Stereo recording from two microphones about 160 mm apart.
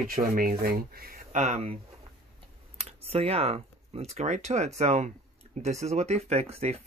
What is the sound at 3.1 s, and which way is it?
Speech, 40° right (ahead or behind).